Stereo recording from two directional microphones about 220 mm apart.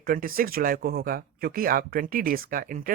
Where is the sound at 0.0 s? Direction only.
40° right (ahead or behind).